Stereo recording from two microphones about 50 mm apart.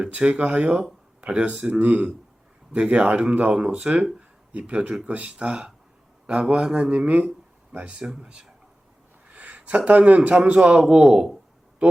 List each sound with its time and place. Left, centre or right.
0.1 s speech: right
1.8 s a man's voice: right
8.0 s a man's voice: centre
9.3 s a man's voice: right
10.8 s a man's voice: centre